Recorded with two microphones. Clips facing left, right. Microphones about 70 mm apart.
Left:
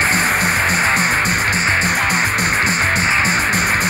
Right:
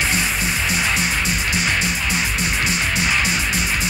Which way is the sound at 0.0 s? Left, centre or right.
Left.